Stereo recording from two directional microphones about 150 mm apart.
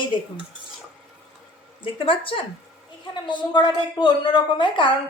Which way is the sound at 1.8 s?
35° left (ahead or behind).